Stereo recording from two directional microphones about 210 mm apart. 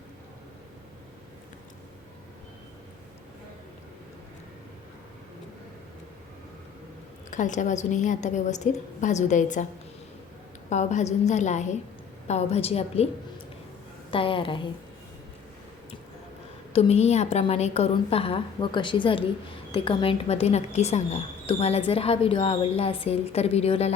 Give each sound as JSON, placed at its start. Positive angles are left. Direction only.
{"t": 7.3, "sound": "a woman's voice", "side_deg": 35}
{"t": 10.7, "sound": "a woman's voice", "side_deg": 35}
{"t": 14.1, "sound": "speech", "side_deg": 25}
{"t": 16.7, "sound": "speech", "side_deg": 30}